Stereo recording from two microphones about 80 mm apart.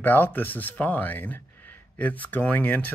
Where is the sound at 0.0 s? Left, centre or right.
Left.